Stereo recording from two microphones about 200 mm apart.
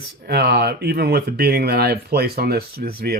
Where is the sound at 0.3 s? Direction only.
55° right (ahead or behind).